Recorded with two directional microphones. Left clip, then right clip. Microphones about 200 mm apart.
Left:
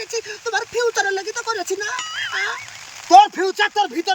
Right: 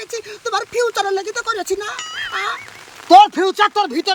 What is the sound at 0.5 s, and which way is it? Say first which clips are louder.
Speech: right 2 dB; 20° right (ahead or behind).